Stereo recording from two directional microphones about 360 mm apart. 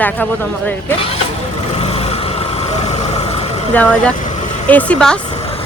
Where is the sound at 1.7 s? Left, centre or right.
Centre.